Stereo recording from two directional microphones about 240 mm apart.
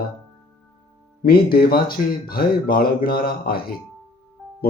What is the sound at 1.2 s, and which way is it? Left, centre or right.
Speech, left.